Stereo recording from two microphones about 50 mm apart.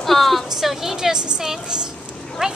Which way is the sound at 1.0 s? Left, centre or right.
Centre.